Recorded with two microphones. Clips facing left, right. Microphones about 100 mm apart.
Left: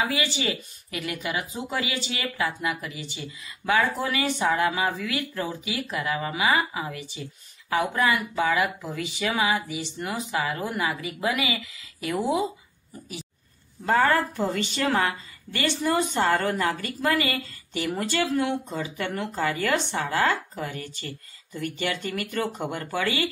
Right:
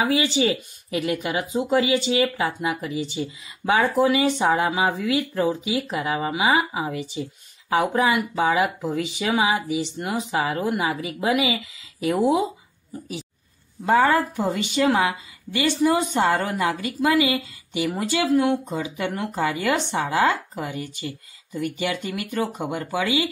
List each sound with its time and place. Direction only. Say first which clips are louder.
0.0 s speech: right 6 dB; 20° right (ahead or behind)
13.8 s speech: right 3 dB; 10° right (ahead or behind)